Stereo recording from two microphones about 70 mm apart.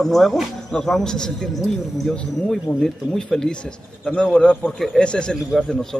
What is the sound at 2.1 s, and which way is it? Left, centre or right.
Speech, centre.